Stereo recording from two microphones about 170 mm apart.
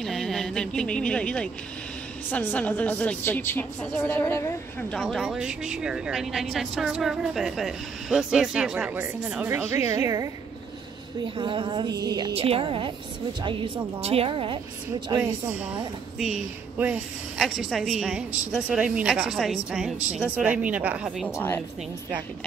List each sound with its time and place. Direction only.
0.0 s a woman's voice: centre (ahead or behind)
4.9 s a woman's voice: centre (ahead or behind); by 10.3 s 20° right (ahead or behind)
11.2 s speech: 30° right (ahead or behind)
12.4 s a woman's voice: 35° right (ahead or behind)
14.0 s a woman's voice: 35° right (ahead or behind)
16.2 s a woman's voice: 5° right (ahead or behind)
21.3 s a woman's voice: 15° left (ahead or behind)